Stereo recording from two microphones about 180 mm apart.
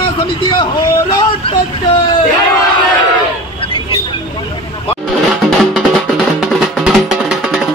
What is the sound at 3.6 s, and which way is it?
Vehicle, 30° left (ahead or behind).